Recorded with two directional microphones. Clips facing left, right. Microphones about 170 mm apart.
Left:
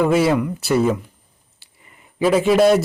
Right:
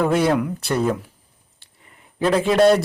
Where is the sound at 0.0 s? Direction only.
5° left (ahead or behind).